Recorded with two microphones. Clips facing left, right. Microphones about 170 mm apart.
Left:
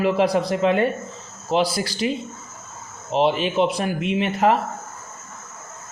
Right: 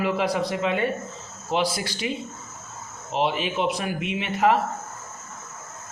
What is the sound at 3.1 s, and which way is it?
A man's voice, 35° left (ahead or behind).